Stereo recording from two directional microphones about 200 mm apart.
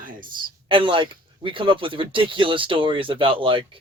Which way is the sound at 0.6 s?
25° right (ahead or behind).